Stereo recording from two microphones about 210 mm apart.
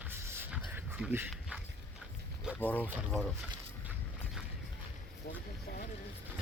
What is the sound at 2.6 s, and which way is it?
Speech, 10° left (ahead or behind).